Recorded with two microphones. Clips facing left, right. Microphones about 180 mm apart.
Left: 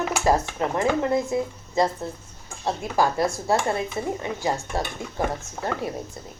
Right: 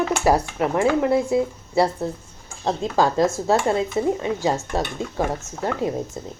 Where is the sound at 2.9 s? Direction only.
15° right (ahead or behind).